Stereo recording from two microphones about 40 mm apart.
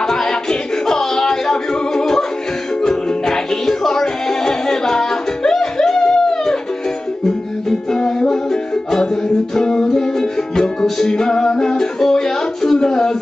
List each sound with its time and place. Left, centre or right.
0.0 s music: centre
7.9 s music: centre
9.6 s music: centre